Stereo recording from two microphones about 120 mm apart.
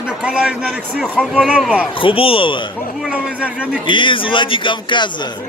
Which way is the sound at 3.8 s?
45° left (ahead or behind).